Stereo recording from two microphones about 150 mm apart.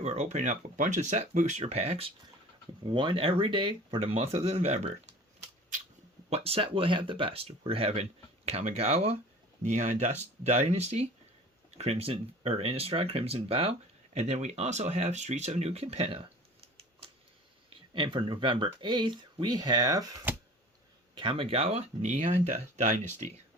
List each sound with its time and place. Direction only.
0.0 s speech: 45° right (ahead or behind)
6.3 s speech: 40° right (ahead or behind)
17.9 s speech: 30° right (ahead or behind)
21.2 s speech: 35° right (ahead or behind); by 23.3 s 50° right (ahead or behind)